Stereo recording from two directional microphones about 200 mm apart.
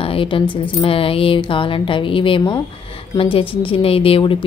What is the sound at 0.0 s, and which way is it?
Speech, 25° left (ahead or behind).